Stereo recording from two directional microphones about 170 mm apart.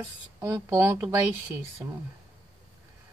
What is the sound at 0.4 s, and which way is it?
Speech, 15° right (ahead or behind).